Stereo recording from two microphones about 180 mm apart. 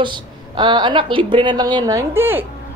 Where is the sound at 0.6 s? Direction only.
25° right (ahead or behind).